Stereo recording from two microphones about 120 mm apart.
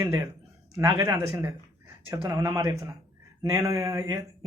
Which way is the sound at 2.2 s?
25° right (ahead or behind).